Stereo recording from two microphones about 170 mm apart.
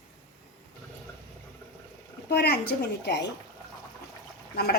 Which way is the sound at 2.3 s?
70° left (ahead or behind).